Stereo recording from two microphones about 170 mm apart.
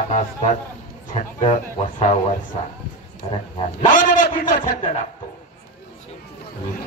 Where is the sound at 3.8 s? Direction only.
50° left (ahead or behind).